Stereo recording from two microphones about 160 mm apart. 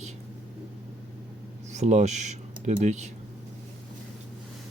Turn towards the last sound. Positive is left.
turn(degrees=-45)  # may be behind; listen again after turning